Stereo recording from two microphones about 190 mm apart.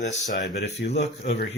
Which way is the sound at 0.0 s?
40° left (ahead or behind).